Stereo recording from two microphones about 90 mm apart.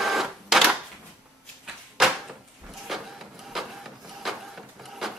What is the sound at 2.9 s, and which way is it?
Vehicle, centre (ahead or behind).